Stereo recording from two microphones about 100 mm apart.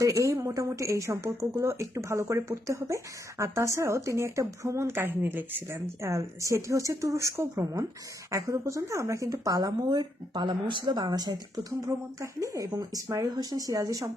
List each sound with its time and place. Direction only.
0.0 s a woman's voice: 30° right (ahead or behind)